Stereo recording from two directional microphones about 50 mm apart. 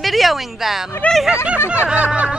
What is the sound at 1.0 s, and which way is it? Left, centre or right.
Speech, left.